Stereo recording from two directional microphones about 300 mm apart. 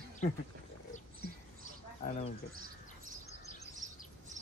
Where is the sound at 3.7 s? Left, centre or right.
Right.